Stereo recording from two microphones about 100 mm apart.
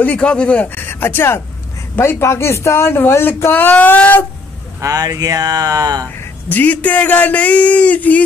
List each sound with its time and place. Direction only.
0.0 s speech: 10° left (ahead or behind)
4.7 s speech: 35° right (ahead or behind)
6.5 s speech: 15° left (ahead or behind)